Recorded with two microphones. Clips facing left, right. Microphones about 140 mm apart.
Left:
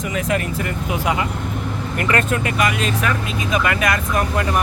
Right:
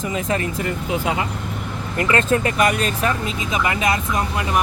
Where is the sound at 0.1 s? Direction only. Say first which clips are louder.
Left 2 dB; 30° right (ahead or behind).